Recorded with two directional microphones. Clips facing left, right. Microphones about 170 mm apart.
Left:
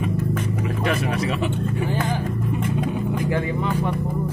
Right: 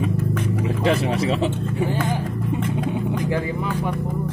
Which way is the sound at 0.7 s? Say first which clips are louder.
Right 4 dB; 25° right (ahead or behind).